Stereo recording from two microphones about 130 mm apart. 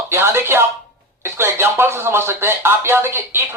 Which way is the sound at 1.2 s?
20° right (ahead or behind).